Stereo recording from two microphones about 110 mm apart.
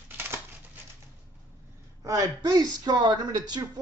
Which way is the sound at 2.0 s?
35° right (ahead or behind).